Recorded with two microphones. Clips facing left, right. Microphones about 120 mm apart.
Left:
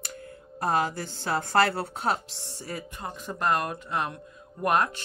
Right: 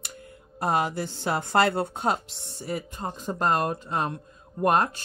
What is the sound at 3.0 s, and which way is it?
Speech, 35° right (ahead or behind).